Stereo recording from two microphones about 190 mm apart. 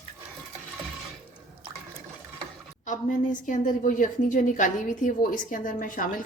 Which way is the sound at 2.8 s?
40° left (ahead or behind).